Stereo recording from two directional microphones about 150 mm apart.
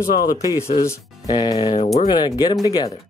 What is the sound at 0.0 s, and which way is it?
Speech, 80° left.